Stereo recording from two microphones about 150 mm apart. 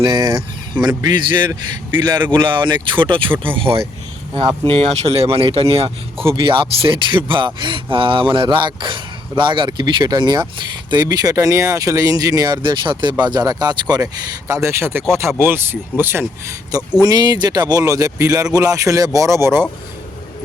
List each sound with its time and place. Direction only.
0.0 s speech: 25° right (ahead or behind)